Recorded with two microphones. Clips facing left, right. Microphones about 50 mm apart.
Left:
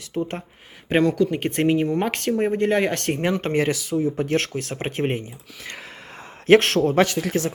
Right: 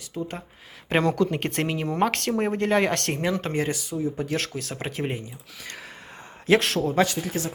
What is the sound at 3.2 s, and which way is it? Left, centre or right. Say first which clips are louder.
Speech: left 3 dB; left.